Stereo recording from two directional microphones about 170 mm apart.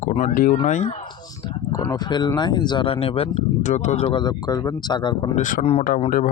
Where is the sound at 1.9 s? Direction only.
25° left (ahead or behind); by 4.1 s 40° left (ahead or behind).